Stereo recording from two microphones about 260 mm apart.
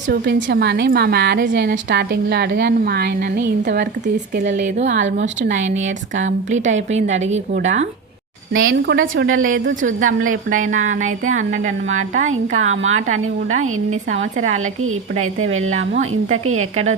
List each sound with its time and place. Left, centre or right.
0.1 s a woman's voice: right
4.4 s a woman's voice: right
8.5 s a woman's voice: right
9.8 s a woman's voice: right
12.5 s a woman's voice: right